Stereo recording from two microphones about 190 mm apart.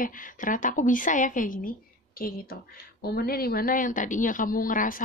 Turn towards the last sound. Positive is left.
turn(degrees=45)  # may be behind; listen again after turning